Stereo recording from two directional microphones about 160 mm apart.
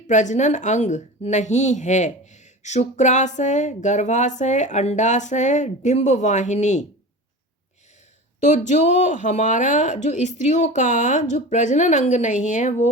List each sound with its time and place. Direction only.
0.1 s speech: 50° left (ahead or behind)
8.4 s speech: 50° left (ahead or behind)